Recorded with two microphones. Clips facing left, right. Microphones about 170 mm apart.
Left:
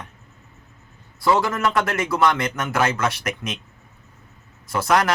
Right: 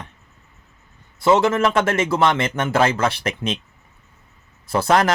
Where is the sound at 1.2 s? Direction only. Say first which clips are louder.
Right 4 dB; 25° right (ahead or behind).